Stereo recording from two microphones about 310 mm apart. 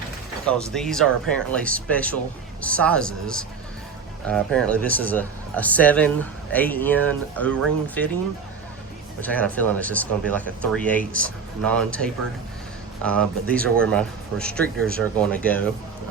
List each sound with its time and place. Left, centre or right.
0.4 s a man's voice: centre
9.2 s a man's voice: centre